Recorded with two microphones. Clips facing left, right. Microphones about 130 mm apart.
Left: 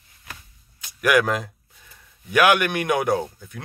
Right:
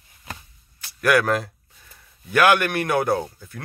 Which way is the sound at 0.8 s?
15° left (ahead or behind).